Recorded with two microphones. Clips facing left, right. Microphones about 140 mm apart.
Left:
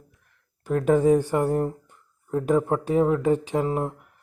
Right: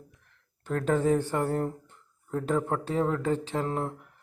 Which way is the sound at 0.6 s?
10° left (ahead or behind).